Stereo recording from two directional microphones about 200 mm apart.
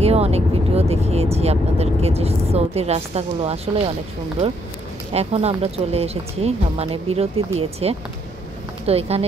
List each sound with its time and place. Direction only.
0.0 s speech: 30° right (ahead or behind)
5.1 s speech: 30° right (ahead or behind)